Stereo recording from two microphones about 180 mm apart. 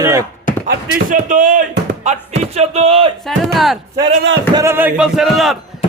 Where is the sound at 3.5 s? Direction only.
Centre (ahead or behind).